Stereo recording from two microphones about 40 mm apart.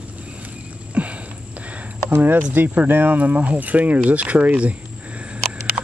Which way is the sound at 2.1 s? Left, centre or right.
Right.